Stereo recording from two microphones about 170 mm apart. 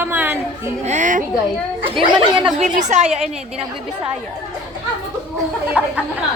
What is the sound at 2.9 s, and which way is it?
Speech, 45° right (ahead or behind).